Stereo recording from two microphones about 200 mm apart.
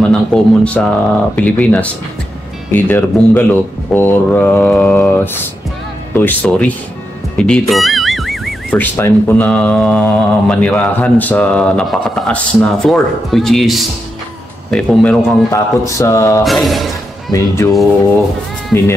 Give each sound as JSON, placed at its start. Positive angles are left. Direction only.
{"t": 0.0, "sound": "speech", "side_deg": 5}
{"t": 7.3, "sound": "music", "side_deg": 5}
{"t": 8.9, "sound": "speech", "side_deg": 10}
{"t": 15.5, "sound": "speech", "side_deg": 15}
{"t": 16.4, "sound": "speech", "side_deg": 0}
{"t": 17.3, "sound": "speech", "side_deg": 15}
{"t": 18.7, "sound": "speech", "side_deg": 10}